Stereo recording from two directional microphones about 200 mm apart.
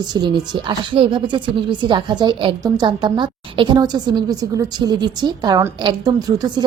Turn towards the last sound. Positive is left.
turn(degrees=-20)  # may be behind; listen again after turning